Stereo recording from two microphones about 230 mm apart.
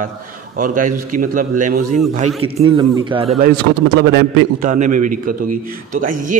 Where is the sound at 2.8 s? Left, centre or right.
Centre.